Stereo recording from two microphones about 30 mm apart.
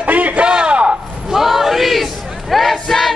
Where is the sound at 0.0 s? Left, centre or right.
Right.